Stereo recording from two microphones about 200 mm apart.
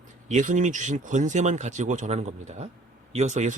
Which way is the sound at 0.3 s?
40° right (ahead or behind).